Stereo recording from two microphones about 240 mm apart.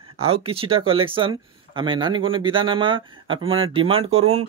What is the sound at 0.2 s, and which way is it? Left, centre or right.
Speech, right.